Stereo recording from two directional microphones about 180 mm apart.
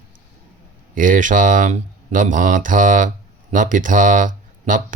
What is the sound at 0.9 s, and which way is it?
Speech, 45° right (ahead or behind).